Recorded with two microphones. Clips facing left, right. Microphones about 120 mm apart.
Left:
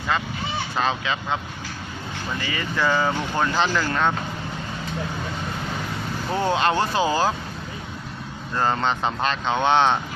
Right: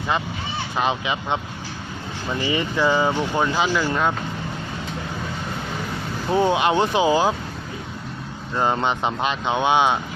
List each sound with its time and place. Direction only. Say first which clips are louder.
0.8 s speech: right 2 dB; 15° right (ahead or behind)
2.4 s speech: right 4 dB; 20° right (ahead or behind)
6.3 s speech: right 3 dB; 15° right (ahead or behind)
8.5 s speech: right 1 dB; 15° right (ahead or behind)